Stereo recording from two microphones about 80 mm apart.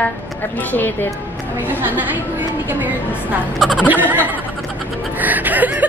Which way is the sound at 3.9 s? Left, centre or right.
Right.